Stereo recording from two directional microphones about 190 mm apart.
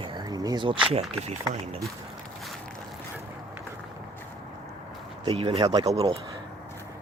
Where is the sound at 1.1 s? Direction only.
35° right (ahead or behind).